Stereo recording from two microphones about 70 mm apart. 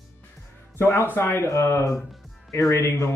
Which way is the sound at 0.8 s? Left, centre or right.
Left.